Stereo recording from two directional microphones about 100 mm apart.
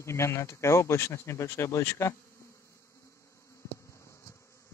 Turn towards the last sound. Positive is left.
turn(degrees=30)  # may be behind; listen again after turning